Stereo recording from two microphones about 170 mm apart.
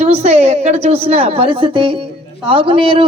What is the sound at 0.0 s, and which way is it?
A woman's voice, 40° right (ahead or behind).